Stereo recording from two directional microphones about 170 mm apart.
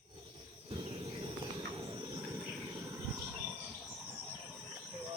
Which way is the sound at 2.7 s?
20° right (ahead or behind).